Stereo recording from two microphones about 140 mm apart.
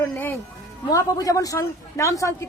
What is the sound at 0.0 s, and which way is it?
Speech, 15° left (ahead or behind).